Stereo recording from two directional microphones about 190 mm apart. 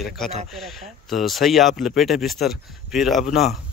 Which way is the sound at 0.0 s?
Centre (ahead or behind).